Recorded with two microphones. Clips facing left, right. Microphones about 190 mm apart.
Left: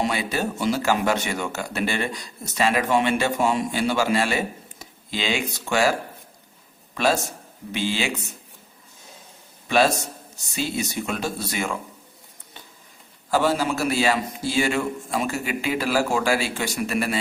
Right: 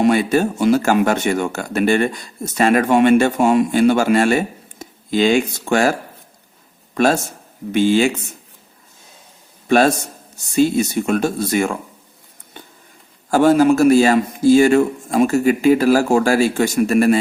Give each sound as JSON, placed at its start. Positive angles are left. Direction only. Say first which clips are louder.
{"t": 0.0, "sound": "a man's voice", "louder": "right 10 dB", "side_deg": -50}
{"t": 9.6, "sound": "a man's voice", "louder": "right 6 dB", "side_deg": -50}
{"t": 13.3, "sound": "speech", "louder": "right 10 dB", "side_deg": -50}